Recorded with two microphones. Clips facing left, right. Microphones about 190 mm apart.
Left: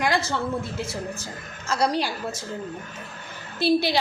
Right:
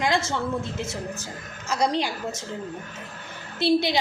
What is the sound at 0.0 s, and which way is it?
A woman's voice, 25° right (ahead or behind).